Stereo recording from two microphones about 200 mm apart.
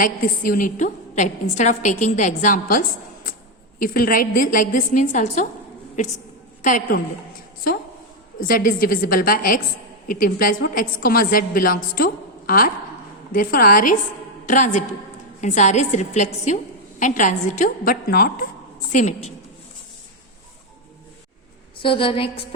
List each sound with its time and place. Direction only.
0.0 s a woman's voice: 45° left (ahead or behind)
6.6 s a woman's voice: 40° left (ahead or behind)
8.4 s a woman's voice: 45° left (ahead or behind)
21.8 s a woman's voice: 25° left (ahead or behind)